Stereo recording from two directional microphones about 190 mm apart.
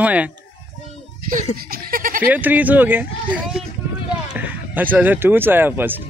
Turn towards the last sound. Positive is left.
turn(degrees=-10)  # may be behind; listen again after turning